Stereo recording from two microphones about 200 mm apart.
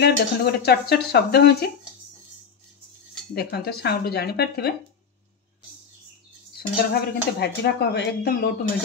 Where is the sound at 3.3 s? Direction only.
55° left (ahead or behind).